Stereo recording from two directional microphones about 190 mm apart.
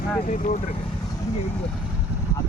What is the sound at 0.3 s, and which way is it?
Speech, 45° left (ahead or behind).